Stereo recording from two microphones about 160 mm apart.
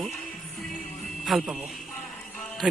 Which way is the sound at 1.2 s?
5° right (ahead or behind).